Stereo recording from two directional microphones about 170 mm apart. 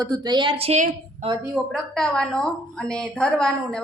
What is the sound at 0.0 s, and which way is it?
Speech, 25° right (ahead or behind).